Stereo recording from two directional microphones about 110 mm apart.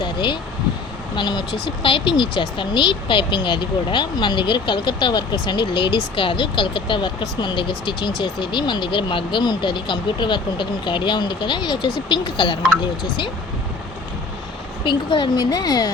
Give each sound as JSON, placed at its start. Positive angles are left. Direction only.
{"t": 0.0, "sound": "speech", "side_deg": 45}
{"t": 14.8, "sound": "a woman's voice", "side_deg": 45}